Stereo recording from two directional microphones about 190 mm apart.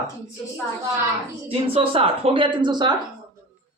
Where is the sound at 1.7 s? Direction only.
30° right (ahead or behind).